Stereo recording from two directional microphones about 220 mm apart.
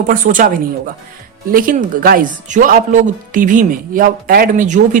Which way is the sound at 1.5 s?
40° right (ahead or behind).